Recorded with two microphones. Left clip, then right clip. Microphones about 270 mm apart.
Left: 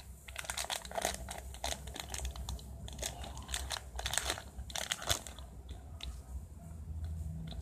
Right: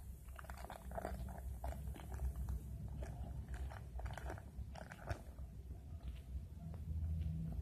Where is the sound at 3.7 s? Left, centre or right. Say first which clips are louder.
Left 13 dB; left.